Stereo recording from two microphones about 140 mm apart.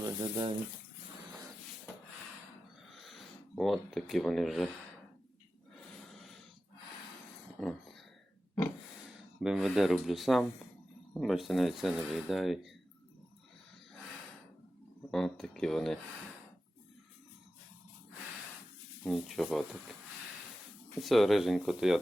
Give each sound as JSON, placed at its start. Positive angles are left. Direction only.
{"t": 0.0, "sound": "speech", "side_deg": -30}
{"t": 2.9, "sound": "speech", "side_deg": 0}
{"t": 6.1, "sound": "snort", "side_deg": 0}
{"t": 7.6, "sound": "speech", "side_deg": 0}
{"t": 9.4, "sound": "speech", "side_deg": -5}
{"t": 15.1, "sound": "speech", "side_deg": 0}
{"t": 19.0, "sound": "speech", "side_deg": 0}
{"t": 21.0, "sound": "speech", "side_deg": 0}